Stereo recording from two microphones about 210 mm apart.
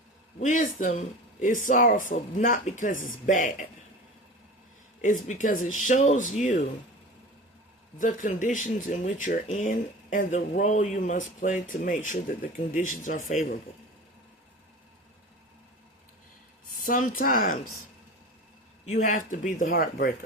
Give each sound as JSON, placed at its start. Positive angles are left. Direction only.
{"t": 0.3, "sound": "speech", "side_deg": 40}
{"t": 5.3, "sound": "speech", "side_deg": 35}
{"t": 7.9, "sound": "speech", "side_deg": 40}
{"t": 16.8, "sound": "speech", "side_deg": 40}
{"t": 18.9, "sound": "speech", "side_deg": 35}